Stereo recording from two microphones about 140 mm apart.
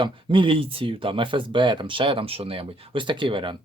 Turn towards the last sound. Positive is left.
turn(degrees=-35)  # may be behind; listen again after turning